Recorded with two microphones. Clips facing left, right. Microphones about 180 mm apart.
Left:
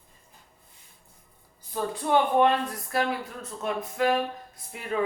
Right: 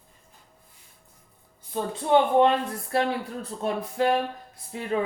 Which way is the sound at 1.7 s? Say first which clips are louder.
Right 3 dB; 25° right (ahead or behind).